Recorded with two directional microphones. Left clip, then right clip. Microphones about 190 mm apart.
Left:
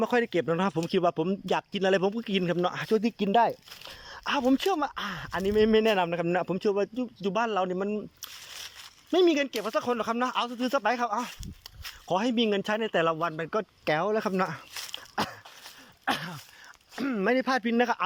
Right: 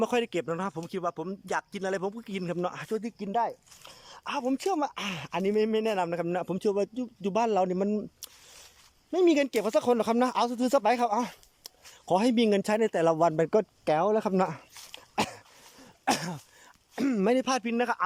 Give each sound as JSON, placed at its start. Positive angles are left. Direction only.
{"t": 0.0, "sound": "speech", "side_deg": -10}
{"t": 13.8, "sound": "speech", "side_deg": -15}
{"t": 14.9, "sound": "throat clearing", "side_deg": -20}
{"t": 16.0, "sound": "speech", "side_deg": -30}